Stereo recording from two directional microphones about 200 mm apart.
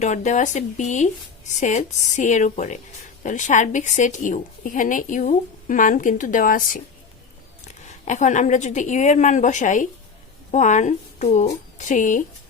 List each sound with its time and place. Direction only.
0.0 s speech: 35° left (ahead or behind)
7.9 s speech: 35° left (ahead or behind)